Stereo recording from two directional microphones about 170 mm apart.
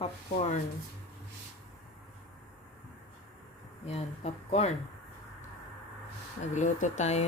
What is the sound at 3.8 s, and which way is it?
Speech, 40° left (ahead or behind).